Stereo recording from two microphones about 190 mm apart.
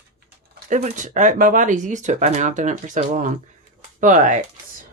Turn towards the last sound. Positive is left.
turn(degrees=-45)  # may be behind; listen again after turning